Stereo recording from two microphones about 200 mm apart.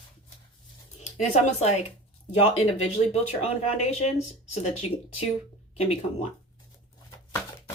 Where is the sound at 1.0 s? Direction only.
35° left (ahead or behind).